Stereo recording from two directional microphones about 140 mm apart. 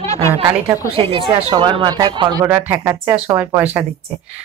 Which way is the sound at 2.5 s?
15° right (ahead or behind).